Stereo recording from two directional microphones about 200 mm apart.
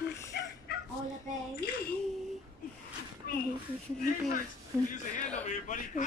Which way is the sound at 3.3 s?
50° left (ahead or behind).